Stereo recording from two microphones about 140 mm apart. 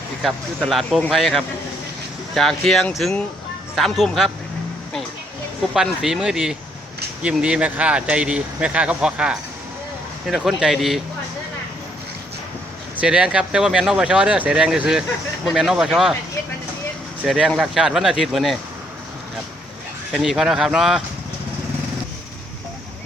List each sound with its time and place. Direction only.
0.2 s speech: centre (ahead or behind)
5.7 s speech: 5° right (ahead or behind)
13.0 s speech: 5° right (ahead or behind)
17.2 s speech: centre (ahead or behind)
20.1 s speech: centre (ahead or behind)